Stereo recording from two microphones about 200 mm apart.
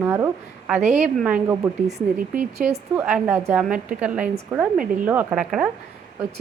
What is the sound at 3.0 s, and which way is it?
A woman's voice, 10° right (ahead or behind).